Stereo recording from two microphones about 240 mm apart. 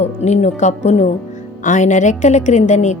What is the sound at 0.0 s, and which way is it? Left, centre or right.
Speech, left.